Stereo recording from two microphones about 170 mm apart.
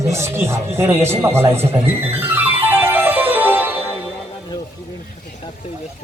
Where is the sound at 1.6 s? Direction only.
15° right (ahead or behind).